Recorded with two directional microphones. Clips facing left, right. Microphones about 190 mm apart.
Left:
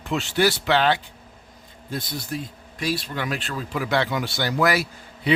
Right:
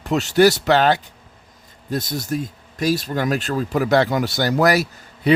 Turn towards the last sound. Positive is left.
turn(degrees=-45)  # may be behind; listen again after turning